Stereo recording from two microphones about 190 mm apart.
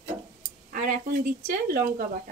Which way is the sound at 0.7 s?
45° right (ahead or behind).